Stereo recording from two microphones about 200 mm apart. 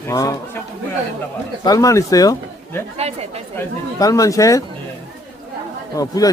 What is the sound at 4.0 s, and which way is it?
Speech, 15° left (ahead or behind).